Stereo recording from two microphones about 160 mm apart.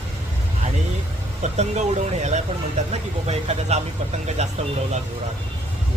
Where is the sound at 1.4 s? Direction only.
45° right (ahead or behind).